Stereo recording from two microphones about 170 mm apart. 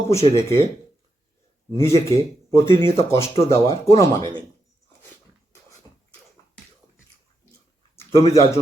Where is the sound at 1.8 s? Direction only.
15° left (ahead or behind).